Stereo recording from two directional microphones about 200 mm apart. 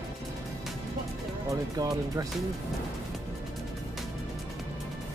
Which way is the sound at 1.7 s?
20° right (ahead or behind).